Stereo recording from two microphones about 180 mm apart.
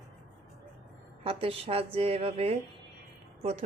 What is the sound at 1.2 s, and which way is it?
A woman's voice, 30° right (ahead or behind).